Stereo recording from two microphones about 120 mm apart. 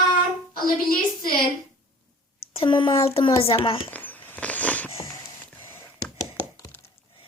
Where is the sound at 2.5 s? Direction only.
45° left (ahead or behind).